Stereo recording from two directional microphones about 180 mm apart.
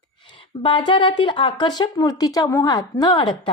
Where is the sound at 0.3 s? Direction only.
30° left (ahead or behind).